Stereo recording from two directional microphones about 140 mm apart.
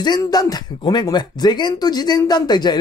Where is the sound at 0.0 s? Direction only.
30° left (ahead or behind).